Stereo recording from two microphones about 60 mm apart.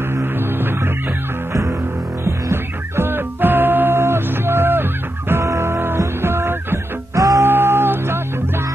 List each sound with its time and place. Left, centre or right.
0.1 s music: right
1.5 s music: right
2.2 s music: right
7.2 s music: right
7.4 s music: right